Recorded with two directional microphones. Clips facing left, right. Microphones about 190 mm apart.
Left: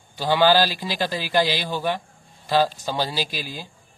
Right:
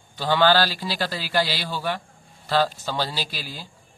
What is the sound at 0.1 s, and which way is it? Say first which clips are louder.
A man's voice: left 1 dB; 15° left (ahead or behind).